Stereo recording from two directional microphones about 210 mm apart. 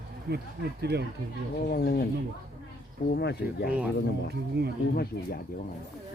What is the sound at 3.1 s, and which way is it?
Speech, 50° left (ahead or behind).